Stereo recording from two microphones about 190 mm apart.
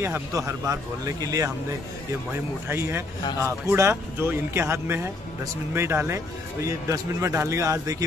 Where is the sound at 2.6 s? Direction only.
15° right (ahead or behind).